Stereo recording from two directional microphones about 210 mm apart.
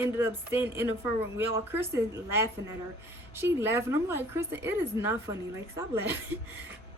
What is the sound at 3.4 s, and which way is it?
A woman's voice, 10° right (ahead or behind).